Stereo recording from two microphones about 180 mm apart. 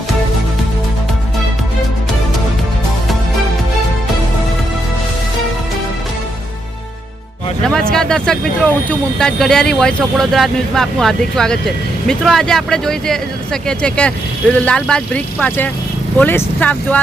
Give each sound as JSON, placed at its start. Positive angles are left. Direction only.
{"t": 7.6, "sound": "speech", "side_deg": 5}